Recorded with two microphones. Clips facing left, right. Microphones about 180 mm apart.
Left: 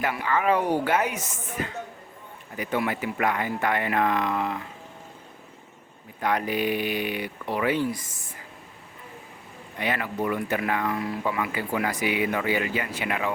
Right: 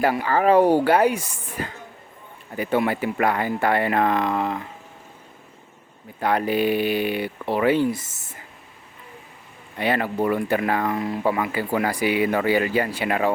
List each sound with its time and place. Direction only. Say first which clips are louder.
0.0 s speech: right 5 dB; 35° right (ahead or behind)
6.1 s speech: right 4 dB; 30° right (ahead or behind)
9.7 s speech: right 6 dB; 30° right (ahead or behind)